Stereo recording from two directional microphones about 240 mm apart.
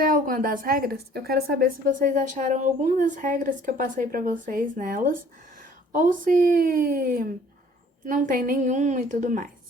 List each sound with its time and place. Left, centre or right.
0.0 s a woman's voice: right